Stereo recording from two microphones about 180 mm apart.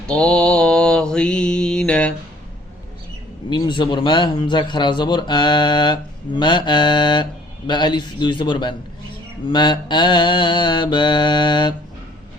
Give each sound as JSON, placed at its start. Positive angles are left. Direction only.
{"t": 0.1, "sound": "mantra", "side_deg": 5}
{"t": 3.5, "sound": "a man's voice", "side_deg": 25}